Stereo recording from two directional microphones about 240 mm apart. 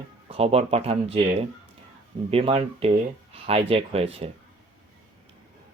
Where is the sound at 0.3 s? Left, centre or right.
Right.